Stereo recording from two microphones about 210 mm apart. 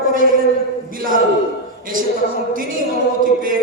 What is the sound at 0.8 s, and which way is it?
Speech, 40° right (ahead or behind).